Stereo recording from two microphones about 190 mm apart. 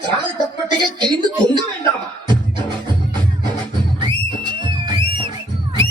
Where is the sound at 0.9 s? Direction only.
20° right (ahead or behind).